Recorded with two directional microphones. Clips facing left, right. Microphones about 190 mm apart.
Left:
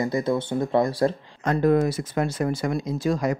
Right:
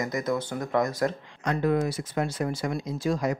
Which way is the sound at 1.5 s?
45° left (ahead or behind).